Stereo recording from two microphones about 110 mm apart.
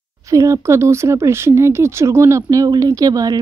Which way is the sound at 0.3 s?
30° right (ahead or behind).